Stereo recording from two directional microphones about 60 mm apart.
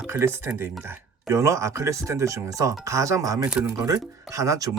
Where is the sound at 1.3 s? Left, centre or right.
Right.